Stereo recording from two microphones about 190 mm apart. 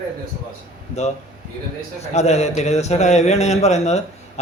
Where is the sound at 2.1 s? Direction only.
35° left (ahead or behind).